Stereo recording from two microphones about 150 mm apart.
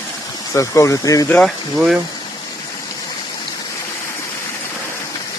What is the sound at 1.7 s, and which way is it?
Speech, 5° right (ahead or behind).